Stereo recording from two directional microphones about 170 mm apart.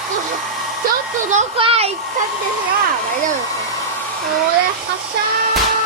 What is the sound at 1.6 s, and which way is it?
Speech, 35° right (ahead or behind).